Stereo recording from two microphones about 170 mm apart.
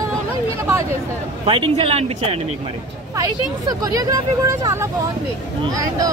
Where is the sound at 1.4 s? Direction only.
30° right (ahead or behind).